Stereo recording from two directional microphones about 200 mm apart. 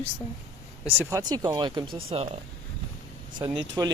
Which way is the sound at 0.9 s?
15° right (ahead or behind).